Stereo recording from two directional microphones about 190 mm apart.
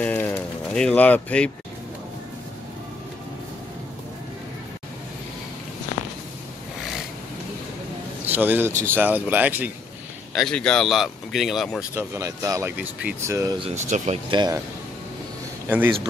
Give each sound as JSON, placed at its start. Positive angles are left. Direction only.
{"t": 0.0, "sound": "a sound", "side_deg": 10}
{"t": 8.3, "sound": "speech", "side_deg": -10}
{"t": 10.3, "sound": "speech", "side_deg": 0}
{"t": 11.9, "sound": "speech", "side_deg": -15}
{"t": 13.7, "sound": "speech", "side_deg": -40}
{"t": 14.3, "sound": "speech", "side_deg": -20}